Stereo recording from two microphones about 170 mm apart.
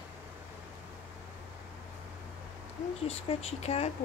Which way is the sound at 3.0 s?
35° left (ahead or behind).